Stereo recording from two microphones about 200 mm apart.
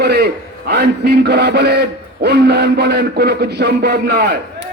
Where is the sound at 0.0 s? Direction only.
55° right (ahead or behind).